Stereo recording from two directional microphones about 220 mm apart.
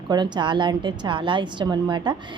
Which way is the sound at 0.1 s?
20° right (ahead or behind).